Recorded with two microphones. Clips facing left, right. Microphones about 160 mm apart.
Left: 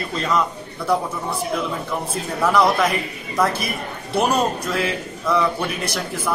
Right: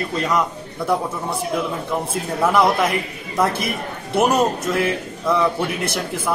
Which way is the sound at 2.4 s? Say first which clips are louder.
Even; 20° right (ahead or behind).